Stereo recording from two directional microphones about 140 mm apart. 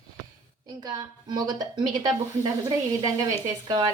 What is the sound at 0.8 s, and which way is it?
A woman's voice, 30° right (ahead or behind).